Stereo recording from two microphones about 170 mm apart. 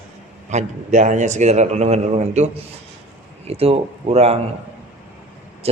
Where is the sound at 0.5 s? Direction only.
45° right (ahead or behind).